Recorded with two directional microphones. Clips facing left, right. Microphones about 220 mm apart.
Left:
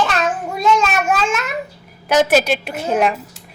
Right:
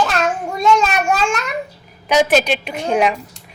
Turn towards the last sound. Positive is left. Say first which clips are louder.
# right 1 dB
turn(degrees=5)  # may be behind; listen again after turning